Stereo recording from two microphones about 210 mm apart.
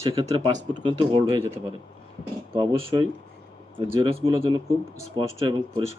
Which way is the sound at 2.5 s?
25° right (ahead or behind).